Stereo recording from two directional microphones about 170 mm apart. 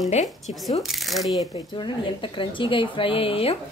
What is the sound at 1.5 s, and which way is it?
A woman's voice, 30° left (ahead or behind).